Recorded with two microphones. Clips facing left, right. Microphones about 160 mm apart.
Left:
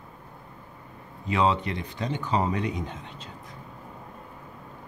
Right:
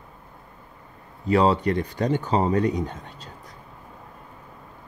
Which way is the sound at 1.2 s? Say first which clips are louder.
Right 5 dB; 40° right (ahead or behind).